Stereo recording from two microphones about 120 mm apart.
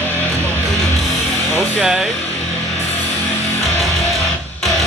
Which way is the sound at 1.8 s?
5° right (ahead or behind).